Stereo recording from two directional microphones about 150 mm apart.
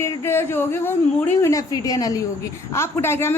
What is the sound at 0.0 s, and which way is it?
A woman's voice, 20° left (ahead or behind).